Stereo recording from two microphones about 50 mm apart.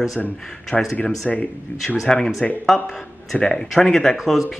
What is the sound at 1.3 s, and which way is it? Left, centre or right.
Speech, left.